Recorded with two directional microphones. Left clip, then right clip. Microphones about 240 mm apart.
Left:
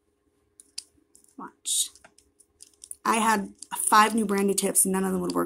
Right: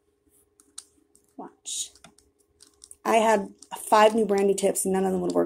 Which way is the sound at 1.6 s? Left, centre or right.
Centre.